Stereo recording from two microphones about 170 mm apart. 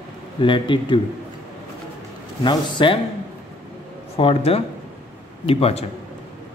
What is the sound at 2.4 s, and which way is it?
Speech, 30° left (ahead or behind).